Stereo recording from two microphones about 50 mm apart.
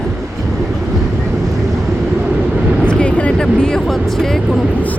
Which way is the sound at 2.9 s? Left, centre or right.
Left.